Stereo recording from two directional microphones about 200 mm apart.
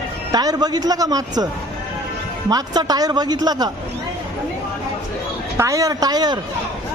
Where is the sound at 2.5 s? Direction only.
20° right (ahead or behind).